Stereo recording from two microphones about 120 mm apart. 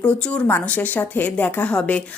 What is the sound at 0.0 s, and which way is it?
A woman's voice, 10° left (ahead or behind).